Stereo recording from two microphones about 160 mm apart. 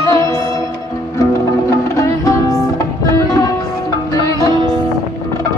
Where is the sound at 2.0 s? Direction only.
20° left (ahead or behind).